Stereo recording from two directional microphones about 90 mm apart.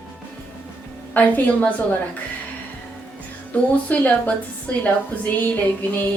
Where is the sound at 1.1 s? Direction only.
20° left (ahead or behind).